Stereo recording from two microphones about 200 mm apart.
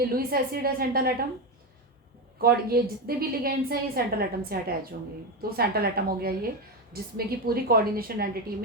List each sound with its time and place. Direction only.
0.0 s a woman's voice: 50° right (ahead or behind)
2.4 s a woman's voice: 50° right (ahead or behind)